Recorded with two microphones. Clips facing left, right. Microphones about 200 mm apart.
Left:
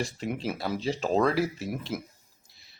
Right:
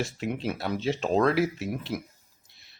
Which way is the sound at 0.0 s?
Centre (ahead or behind).